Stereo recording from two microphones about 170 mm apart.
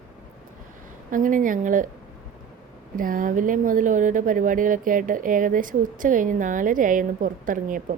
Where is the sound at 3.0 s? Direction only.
55° right (ahead or behind).